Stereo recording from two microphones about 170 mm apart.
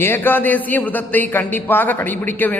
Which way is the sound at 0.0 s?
10° left (ahead or behind).